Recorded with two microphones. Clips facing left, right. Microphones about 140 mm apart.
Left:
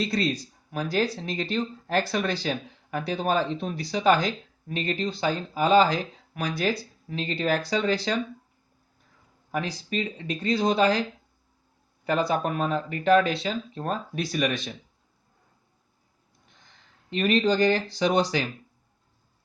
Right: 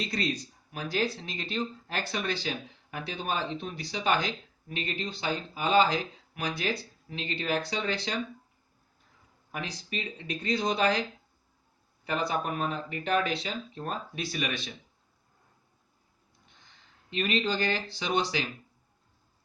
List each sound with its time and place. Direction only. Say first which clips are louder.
0.0 s speech: left 5 dB; 35° left (ahead or behind)
9.5 s speech: left 7 dB; 35° left (ahead or behind)
12.0 s speech: left 5 dB; 35° left (ahead or behind)
17.1 s speech: left 7 dB; 45° left (ahead or behind)